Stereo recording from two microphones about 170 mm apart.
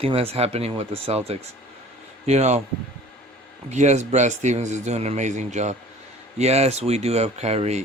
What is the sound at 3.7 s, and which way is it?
Speech, 45° right (ahead or behind).